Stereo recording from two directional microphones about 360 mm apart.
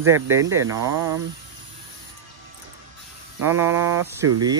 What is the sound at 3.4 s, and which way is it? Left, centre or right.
Speech, centre.